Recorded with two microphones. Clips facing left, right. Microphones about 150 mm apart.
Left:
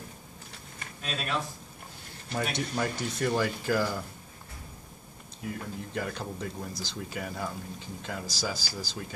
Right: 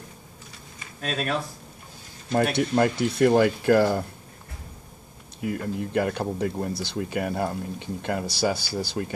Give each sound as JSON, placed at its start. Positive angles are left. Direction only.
{"t": 1.0, "sound": "speech", "side_deg": -55}
{"t": 2.3, "sound": "speech", "side_deg": -60}
{"t": 5.4, "sound": "speech", "side_deg": -70}